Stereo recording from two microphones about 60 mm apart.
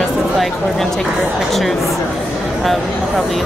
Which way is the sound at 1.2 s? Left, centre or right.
Centre.